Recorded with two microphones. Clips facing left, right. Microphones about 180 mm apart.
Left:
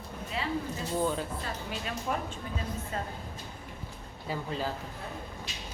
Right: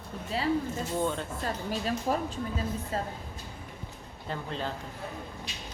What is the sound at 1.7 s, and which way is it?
Speech, 35° right (ahead or behind).